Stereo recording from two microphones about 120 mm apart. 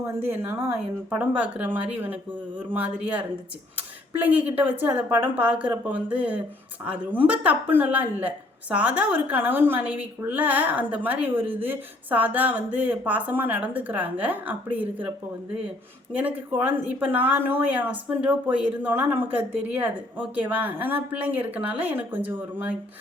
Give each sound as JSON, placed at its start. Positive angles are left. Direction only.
{"t": 0.2, "sound": "speech", "side_deg": -15}
{"t": 16.1, "sound": "speech", "side_deg": -15}